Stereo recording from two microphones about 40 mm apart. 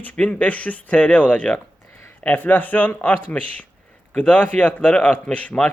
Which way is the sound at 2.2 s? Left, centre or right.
Left.